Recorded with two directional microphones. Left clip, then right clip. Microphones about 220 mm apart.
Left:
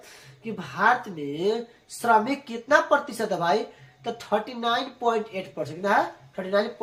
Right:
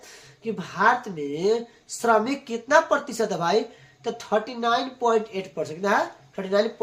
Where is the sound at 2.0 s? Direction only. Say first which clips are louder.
Even; 40° right (ahead or behind).